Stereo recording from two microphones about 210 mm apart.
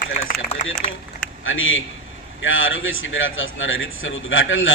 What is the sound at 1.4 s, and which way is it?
A man's voice, 70° left (ahead or behind).